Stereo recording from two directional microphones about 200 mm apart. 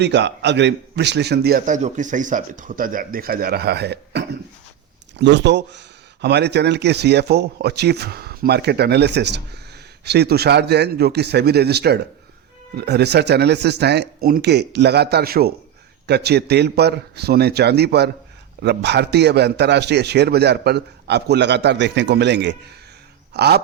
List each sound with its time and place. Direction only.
0.0 s a man's voice: 60° right (ahead or behind)